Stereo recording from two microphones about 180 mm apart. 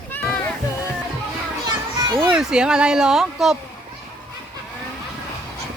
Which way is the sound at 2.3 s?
5° right (ahead or behind).